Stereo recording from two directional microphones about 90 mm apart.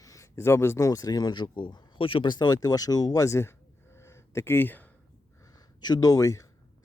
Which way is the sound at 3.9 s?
30° left (ahead or behind).